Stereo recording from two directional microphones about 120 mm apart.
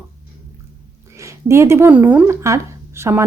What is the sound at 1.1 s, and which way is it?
Speech, 25° right (ahead or behind).